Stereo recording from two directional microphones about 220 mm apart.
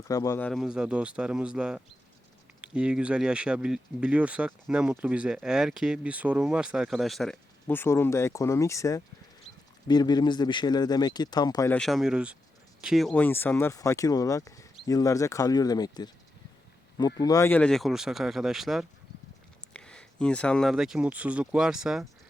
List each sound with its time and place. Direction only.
0.1 s speech: 15° left (ahead or behind)
11.8 s speech: centre (ahead or behind); by 16.0 s 15° left (ahead or behind)
17.2 s speech: 15° left (ahead or behind); by 22.0 s centre (ahead or behind)